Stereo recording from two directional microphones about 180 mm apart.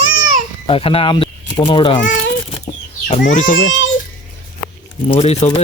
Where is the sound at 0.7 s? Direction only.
30° left (ahead or behind).